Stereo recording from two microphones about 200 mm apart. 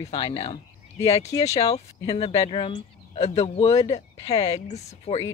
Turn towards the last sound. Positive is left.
turn(degrees=30)  # may be behind; listen again after turning